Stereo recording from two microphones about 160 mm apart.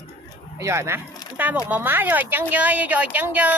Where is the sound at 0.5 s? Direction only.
20° right (ahead or behind).